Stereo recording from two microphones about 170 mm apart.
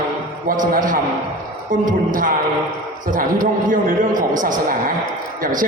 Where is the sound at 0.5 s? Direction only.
50° right (ahead or behind).